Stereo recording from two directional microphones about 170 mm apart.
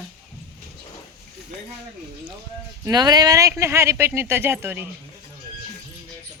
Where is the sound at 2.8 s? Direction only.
25° right (ahead or behind).